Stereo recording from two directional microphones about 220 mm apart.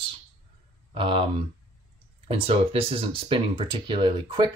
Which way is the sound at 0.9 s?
25° right (ahead or behind).